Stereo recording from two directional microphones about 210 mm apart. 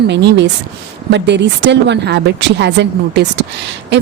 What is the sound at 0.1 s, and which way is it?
Speech, 55° right (ahead or behind).